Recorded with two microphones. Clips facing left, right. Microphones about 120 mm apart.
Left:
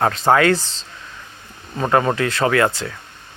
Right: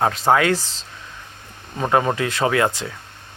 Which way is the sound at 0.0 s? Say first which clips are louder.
Left 2 dB; 5° right (ahead or behind).